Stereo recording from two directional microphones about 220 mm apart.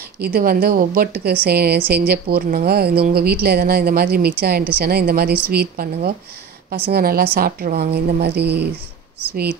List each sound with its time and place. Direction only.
0.2 s a woman's voice: 40° right (ahead or behind)